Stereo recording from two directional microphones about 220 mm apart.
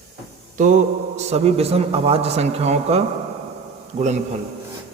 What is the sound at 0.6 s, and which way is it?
A man's voice, 35° right (ahead or behind).